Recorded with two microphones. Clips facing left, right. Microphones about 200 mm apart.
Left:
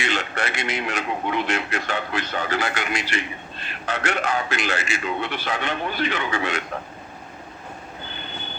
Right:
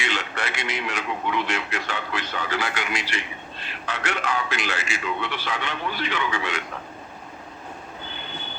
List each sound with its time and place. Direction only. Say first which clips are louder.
0.0 s a man's voice: left 3 dB; 40° left (ahead or behind)